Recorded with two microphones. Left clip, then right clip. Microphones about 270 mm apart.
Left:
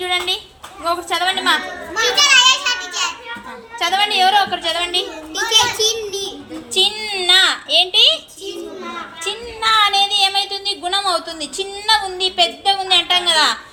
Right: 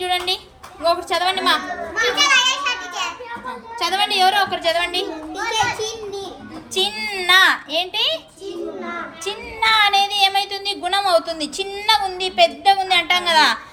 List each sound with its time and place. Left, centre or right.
0.0 s a woman's voice: centre
2.1 s children playing: centre
3.8 s speech: centre
5.0 s a child's voice: centre
6.7 s speech: centre
9.2 s speech: centre